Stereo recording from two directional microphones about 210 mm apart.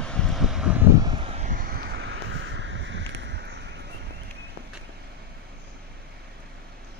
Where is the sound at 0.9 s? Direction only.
20° right (ahead or behind); by 3.7 s 50° right (ahead or behind).